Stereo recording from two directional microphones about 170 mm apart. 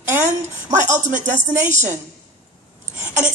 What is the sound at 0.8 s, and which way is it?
Speech, 45° right (ahead or behind).